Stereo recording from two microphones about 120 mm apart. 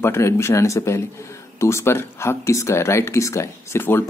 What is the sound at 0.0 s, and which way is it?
Speech, 20° left (ahead or behind).